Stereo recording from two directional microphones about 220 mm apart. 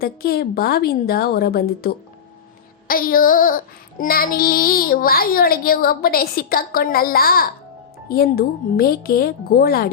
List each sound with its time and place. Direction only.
0.0 s speech: 45° left (ahead or behind)
2.8 s child singing: 40° left (ahead or behind)
8.0 s speech: 40° left (ahead or behind)